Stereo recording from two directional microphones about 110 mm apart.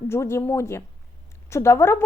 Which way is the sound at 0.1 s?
25° left (ahead or behind).